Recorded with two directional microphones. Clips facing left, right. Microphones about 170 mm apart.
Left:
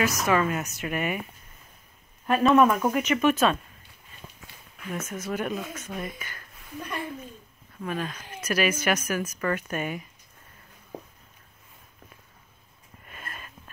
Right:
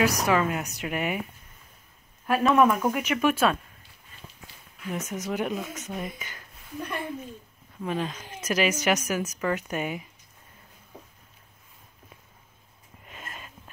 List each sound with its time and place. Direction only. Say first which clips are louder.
0.0 s speech: right 1 dB; 15° right (ahead or behind)
2.2 s speech: left 1 dB; 5° right (ahead or behind)
4.9 s speech: right 1 dB; 15° right (ahead or behind)
7.8 s speech: right 2 dB; 20° right (ahead or behind)
13.0 s a sound: even; 15° right (ahead or behind)